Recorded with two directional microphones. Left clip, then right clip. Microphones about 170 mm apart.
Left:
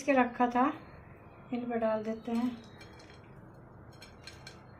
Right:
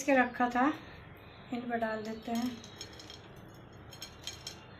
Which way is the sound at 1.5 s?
45° left (ahead or behind).